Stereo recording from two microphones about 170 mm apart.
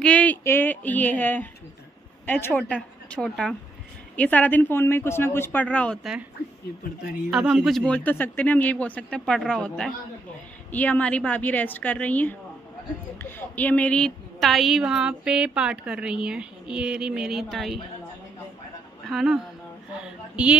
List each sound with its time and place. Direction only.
0.0 s speech: 10° left (ahead or behind)
7.2 s a woman's voice: 5° right (ahead or behind)
19.0 s a woman's voice: 5° right (ahead or behind)